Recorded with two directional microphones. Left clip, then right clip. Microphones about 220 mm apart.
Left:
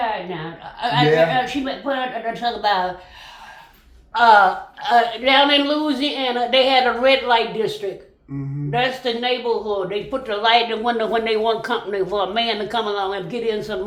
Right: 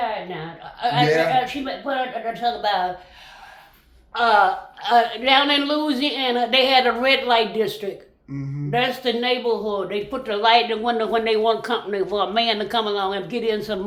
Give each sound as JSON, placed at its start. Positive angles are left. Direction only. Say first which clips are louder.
{"t": 0.6, "sound": "a woman's voice", "louder": "left 1 dB", "side_deg": 15}
{"t": 4.1, "sound": "a woman's voice", "louder": "left 4 dB", "side_deg": 15}
{"t": 8.7, "sound": "a woman's voice", "louder": "even", "side_deg": -20}
{"t": 10.4, "sound": "speech", "louder": "even", "side_deg": 0}